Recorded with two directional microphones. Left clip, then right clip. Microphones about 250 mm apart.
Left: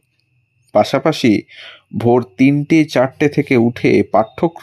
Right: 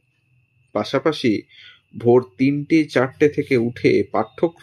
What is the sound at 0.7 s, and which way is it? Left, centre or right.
Speech, left.